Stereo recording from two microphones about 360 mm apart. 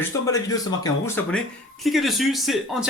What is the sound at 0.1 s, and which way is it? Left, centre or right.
A man's voice, centre.